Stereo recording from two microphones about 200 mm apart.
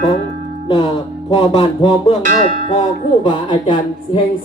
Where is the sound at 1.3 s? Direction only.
25° left (ahead or behind).